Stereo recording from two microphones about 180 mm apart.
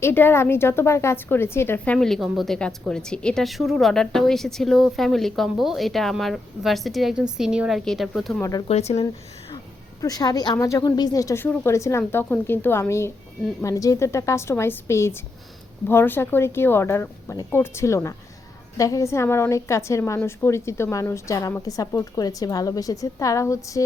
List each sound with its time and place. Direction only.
0.0 s a woman's voice: 10° left (ahead or behind)
8.4 s a woman's voice: 20° left (ahead or behind)
8.6 s speech: 35° left (ahead or behind)
10.0 s a woman's voice: 20° left (ahead or behind)